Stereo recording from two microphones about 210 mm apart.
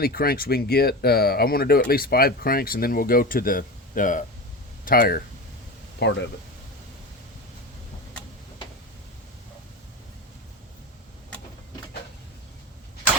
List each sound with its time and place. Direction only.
0.0 s speech: 45° left (ahead or behind)
6.0 s speech: 55° left (ahead or behind)